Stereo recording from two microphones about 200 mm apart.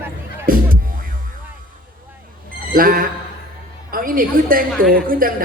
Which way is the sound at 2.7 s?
45° right (ahead or behind).